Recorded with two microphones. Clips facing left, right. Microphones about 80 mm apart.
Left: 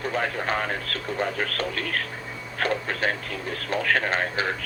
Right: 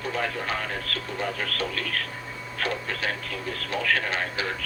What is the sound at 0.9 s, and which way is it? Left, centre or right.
Speech, left.